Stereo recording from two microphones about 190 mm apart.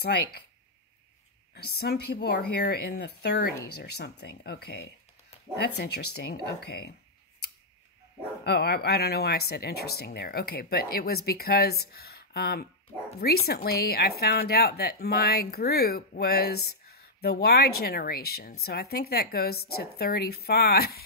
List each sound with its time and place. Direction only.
0.0 s speech: 60° left (ahead or behind)
1.5 s speech: 60° left (ahead or behind)
8.5 s speech: 60° left (ahead or behind)